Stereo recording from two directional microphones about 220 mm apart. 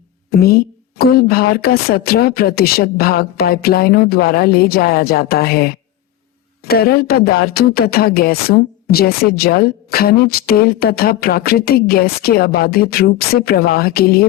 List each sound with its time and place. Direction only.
0.3 s speech: 45° left (ahead or behind)